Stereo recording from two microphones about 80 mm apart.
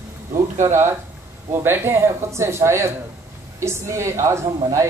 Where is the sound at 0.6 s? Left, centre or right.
Right.